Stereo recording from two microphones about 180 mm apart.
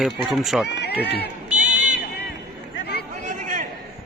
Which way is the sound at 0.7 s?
70° left (ahead or behind).